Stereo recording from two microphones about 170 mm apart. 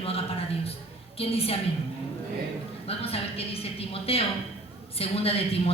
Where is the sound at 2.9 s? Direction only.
35° left (ahead or behind).